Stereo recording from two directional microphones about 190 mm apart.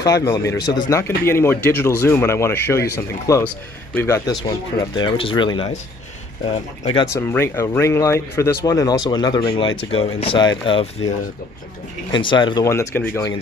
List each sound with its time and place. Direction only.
0.0 s speech: 15° left (ahead or behind)
6.8 s speech: 25° left (ahead or behind)
7.2 s speech: 10° left (ahead or behind)
12.1 s speech: 25° left (ahead or behind)